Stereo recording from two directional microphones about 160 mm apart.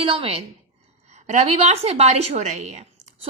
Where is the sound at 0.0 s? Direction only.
35° right (ahead or behind).